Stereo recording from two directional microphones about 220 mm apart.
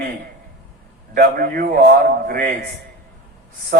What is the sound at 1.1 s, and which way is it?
Speech, 40° right (ahead or behind).